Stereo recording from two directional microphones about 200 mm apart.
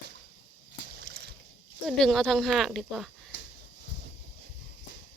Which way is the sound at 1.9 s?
Centre (ahead or behind).